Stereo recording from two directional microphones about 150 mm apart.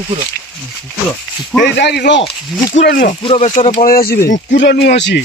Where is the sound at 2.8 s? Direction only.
70° left (ahead or behind).